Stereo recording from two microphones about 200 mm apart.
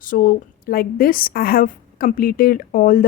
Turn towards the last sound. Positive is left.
turn(degrees=45)  # may be behind; listen again after turning